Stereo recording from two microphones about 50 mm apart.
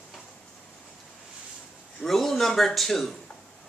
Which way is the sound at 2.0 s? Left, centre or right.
Centre.